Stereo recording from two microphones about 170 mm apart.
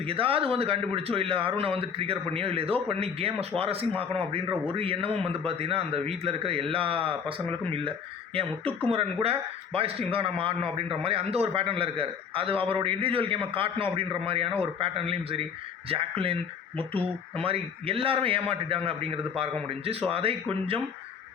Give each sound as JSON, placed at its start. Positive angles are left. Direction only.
{"t": 0.0, "sound": "a man's voice", "side_deg": -35}